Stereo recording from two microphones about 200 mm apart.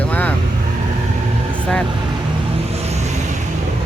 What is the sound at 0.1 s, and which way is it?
Vehicle, 5° left (ahead or behind).